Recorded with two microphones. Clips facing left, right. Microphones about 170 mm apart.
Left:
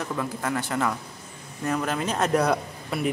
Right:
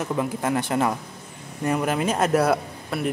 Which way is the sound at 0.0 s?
20° right (ahead or behind).